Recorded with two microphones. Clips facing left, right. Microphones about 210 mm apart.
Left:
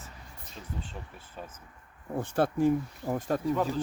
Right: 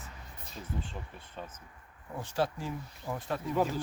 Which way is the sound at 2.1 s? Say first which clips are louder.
Left 5 dB; 55° left (ahead or behind).